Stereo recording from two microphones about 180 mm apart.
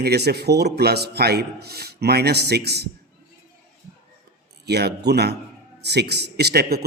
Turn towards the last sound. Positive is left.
turn(degrees=-60)  # may be behind; listen again after turning